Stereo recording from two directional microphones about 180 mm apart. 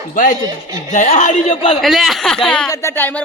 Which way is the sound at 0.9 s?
45° left (ahead or behind).